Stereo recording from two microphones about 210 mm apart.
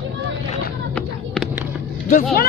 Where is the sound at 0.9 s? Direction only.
5° left (ahead or behind).